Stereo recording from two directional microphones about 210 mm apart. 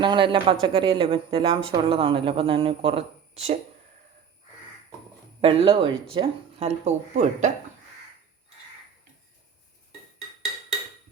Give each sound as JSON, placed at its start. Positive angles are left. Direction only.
{"t": 0.0, "sound": "speech", "side_deg": -25}
{"t": 5.4, "sound": "speech", "side_deg": -25}